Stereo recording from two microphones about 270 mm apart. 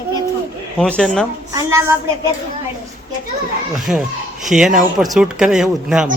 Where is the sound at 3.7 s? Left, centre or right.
Centre.